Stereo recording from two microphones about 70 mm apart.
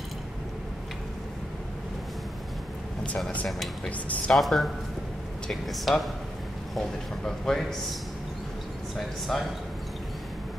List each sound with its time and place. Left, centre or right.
3.4 s a man's voice: centre
9.3 s a man's voice: centre